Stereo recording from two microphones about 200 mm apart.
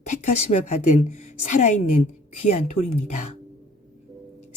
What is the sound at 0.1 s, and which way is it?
Speech, 35° left (ahead or behind).